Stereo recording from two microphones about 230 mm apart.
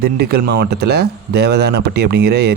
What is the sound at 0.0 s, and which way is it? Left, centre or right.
Speech, right.